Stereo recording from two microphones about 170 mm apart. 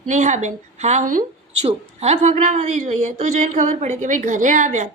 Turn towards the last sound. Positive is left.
turn(degrees=-45)  # may be behind; listen again after turning